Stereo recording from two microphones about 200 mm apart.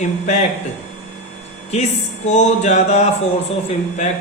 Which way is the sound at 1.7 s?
35° left (ahead or behind).